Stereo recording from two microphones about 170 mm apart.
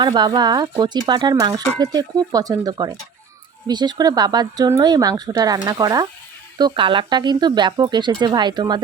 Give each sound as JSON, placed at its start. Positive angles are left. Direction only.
{"t": 0.0, "sound": "speech", "side_deg": -25}